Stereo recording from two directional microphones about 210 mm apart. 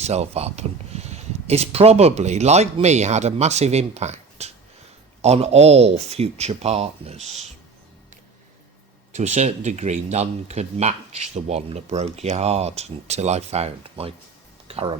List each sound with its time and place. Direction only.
0.0 s speech: 30° right (ahead or behind)
9.1 s speech: 35° right (ahead or behind)